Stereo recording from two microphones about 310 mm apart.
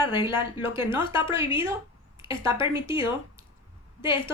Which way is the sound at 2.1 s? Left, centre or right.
Centre.